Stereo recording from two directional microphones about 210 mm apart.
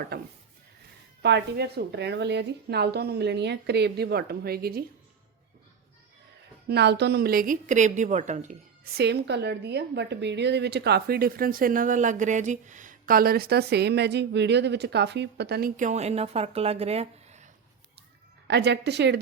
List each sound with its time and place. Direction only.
0.1 s a woman's voice: 45° right (ahead or behind)
6.7 s a woman's voice: 55° right (ahead or behind); by 17.5 s 35° right (ahead or behind)
18.4 s a woman's voice: 55° right (ahead or behind)